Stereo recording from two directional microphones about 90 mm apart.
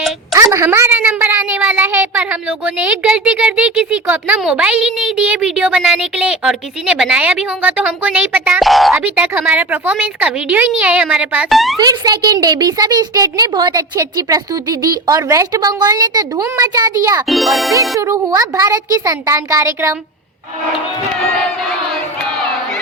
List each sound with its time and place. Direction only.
0.3 s a woman's voice: 30° right (ahead or behind)
0.9 s cat: 20° right (ahead or behind)
1.5 s meow: 20° right (ahead or behind)
2.1 s a woman's voice: 20° right (ahead or behind)
5.2 s a woman's voice: 15° right (ahead or behind)
8.6 s a child's voice: centre (ahead or behind)
9.0 s a woman's voice: 20° right (ahead or behind)
11.4 s a child's voice: centre (ahead or behind)
11.8 s a child's voice: 45° right (ahead or behind)
13.5 s a child's voice: 55° right (ahead or behind)
13.7 s speech: 40° right (ahead or behind)
15.8 s a child's voice: 50° right (ahead or behind)
17.2 s a child's voice: centre (ahead or behind)
17.9 s speech: 40° right (ahead or behind)